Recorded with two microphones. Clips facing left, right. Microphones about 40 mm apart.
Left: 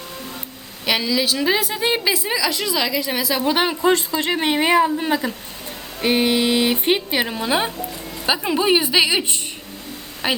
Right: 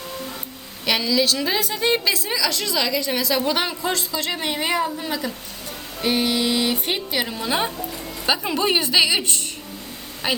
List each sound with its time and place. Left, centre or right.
0.9 s a woman's voice: centre
7.8 s music: centre
8.4 s a woman's voice: centre
10.2 s a woman's voice: centre